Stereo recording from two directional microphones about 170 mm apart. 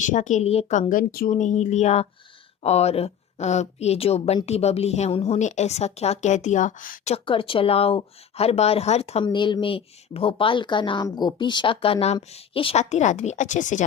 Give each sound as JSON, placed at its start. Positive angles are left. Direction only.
{"t": 0.0, "sound": "speech", "side_deg": 50}
{"t": 7.1, "sound": "speech", "side_deg": 30}